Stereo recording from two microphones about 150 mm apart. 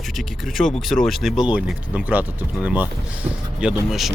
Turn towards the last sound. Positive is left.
turn(degrees=0)  # may be behind; listen again after turning